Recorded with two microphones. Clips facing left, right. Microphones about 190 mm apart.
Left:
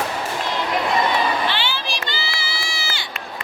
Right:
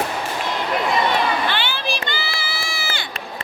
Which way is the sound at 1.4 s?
50° right (ahead or behind).